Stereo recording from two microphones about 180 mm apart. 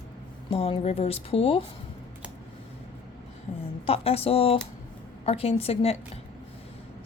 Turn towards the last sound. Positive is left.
turn(degrees=35)  # may be behind; listen again after turning